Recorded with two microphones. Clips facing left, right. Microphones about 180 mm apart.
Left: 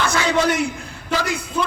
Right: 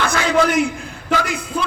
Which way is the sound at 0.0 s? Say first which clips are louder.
Right 1 dB; 55° right (ahead or behind).